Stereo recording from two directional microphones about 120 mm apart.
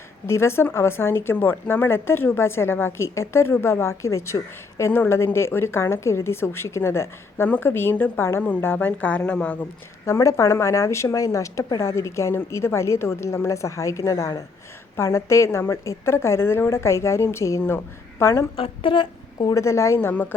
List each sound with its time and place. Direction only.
0.3 s speech: 20° left (ahead or behind)
10.1 s speech: 25° left (ahead or behind)
18.5 s speech: 50° left (ahead or behind); by 20.2 s 20° left (ahead or behind)